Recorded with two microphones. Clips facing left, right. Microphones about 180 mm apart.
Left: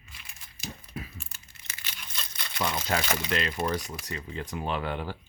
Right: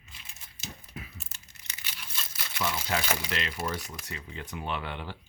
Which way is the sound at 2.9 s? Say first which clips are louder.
Left 3 dB; 50° left (ahead or behind).